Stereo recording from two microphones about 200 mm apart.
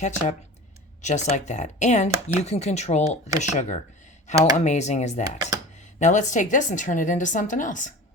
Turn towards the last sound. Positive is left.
turn(degrees=40)  # may be behind; listen again after turning